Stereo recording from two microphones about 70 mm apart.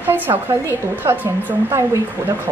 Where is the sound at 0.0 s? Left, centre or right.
Right.